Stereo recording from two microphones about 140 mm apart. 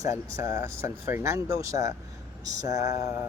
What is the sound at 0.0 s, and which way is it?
Speech, 20° right (ahead or behind).